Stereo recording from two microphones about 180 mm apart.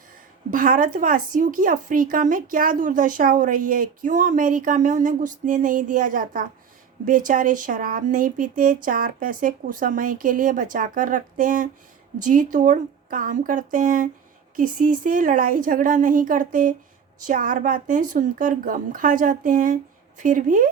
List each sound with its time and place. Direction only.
0.5 s speech: 50° right (ahead or behind)